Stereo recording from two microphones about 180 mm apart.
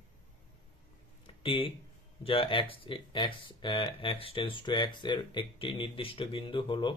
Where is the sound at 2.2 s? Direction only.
30° left (ahead or behind).